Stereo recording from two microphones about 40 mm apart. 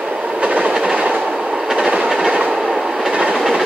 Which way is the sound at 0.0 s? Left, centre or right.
Right.